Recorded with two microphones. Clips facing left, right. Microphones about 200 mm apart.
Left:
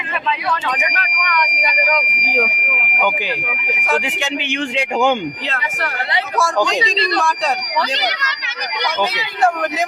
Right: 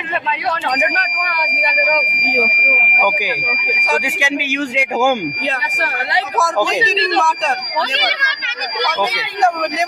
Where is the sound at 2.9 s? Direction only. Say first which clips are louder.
Even; 10° right (ahead or behind).